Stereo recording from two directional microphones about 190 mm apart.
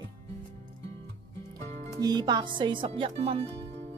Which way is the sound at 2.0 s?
20° right (ahead or behind).